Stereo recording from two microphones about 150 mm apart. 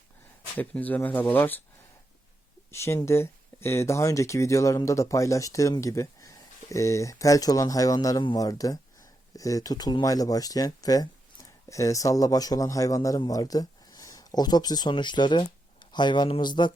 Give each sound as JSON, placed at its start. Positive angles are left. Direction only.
{"t": 0.6, "sound": "speech", "side_deg": 10}
{"t": 2.7, "sound": "speech", "side_deg": 20}